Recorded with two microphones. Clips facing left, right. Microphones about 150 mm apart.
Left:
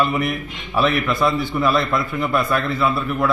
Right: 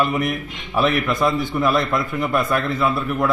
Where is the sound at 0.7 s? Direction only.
45° right (ahead or behind).